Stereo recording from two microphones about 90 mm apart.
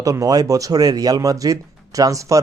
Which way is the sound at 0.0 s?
40° right (ahead or behind).